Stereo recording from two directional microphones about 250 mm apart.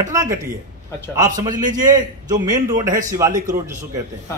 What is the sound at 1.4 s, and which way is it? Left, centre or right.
A man's voice, centre.